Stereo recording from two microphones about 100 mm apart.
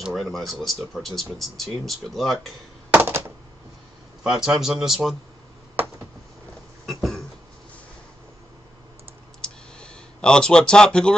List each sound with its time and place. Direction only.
0.0 s speech: centre (ahead or behind)
2.9 s a sound: 20° right (ahead or behind)
4.2 s speech: 5° right (ahead or behind)
6.9 s cough: centre (ahead or behind)
9.4 s clicking: 10° left (ahead or behind)